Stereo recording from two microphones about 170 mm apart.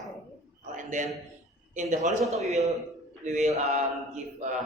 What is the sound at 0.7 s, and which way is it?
A man's voice, 45° right (ahead or behind).